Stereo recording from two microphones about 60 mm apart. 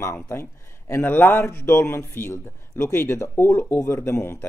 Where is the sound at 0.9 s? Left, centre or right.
Left.